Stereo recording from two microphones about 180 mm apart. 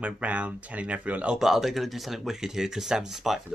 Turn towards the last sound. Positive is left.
turn(degrees=0)  # may be behind; listen again after turning